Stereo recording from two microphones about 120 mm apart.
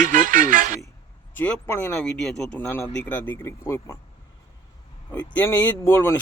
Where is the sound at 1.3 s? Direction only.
15° left (ahead or behind).